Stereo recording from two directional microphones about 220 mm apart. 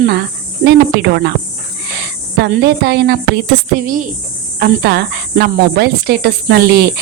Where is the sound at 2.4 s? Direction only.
45° right (ahead or behind).